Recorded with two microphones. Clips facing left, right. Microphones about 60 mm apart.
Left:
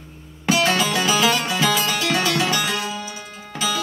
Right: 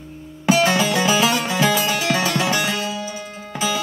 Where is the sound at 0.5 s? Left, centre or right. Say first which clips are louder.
Right 2 dB; right.